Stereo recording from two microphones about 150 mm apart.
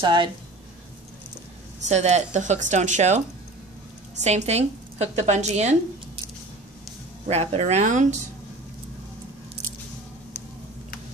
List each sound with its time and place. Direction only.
0.0 s speech: 30° right (ahead or behind)
1.8 s speech: 50° right (ahead or behind)
4.2 s speech: 50° right (ahead or behind)
7.2 s speech: 45° right (ahead or behind)